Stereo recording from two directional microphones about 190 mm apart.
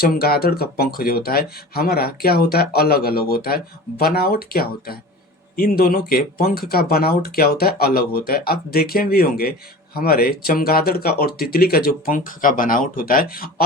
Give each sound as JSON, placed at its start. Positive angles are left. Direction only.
{"t": 0.0, "sound": "speech", "side_deg": 55}